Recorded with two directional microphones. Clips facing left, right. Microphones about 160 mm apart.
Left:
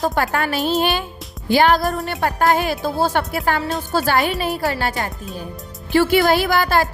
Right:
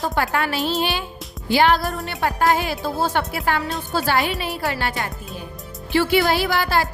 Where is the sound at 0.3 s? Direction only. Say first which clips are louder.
Left 2 dB; 45° left (ahead or behind).